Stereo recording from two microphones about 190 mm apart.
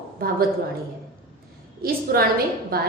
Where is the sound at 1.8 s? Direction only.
50° right (ahead or behind).